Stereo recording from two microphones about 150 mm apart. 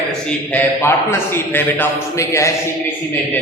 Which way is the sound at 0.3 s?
10° left (ahead or behind).